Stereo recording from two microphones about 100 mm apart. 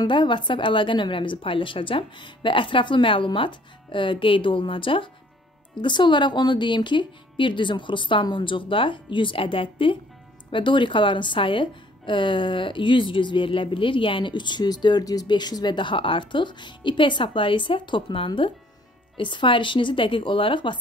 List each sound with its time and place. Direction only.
0.0 s speech: 50° left (ahead or behind)